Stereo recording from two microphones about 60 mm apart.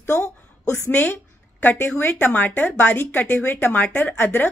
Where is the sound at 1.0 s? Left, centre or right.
Left.